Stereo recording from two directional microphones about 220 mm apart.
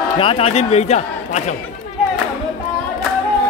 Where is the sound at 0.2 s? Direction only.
25° left (ahead or behind).